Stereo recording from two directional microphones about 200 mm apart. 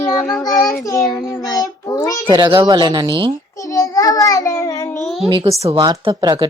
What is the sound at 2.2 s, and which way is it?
Speech, 25° right (ahead or behind).